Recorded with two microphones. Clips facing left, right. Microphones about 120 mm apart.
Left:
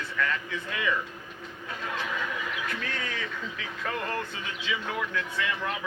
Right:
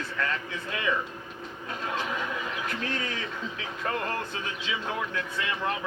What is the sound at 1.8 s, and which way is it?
Speech, 25° right (ahead or behind).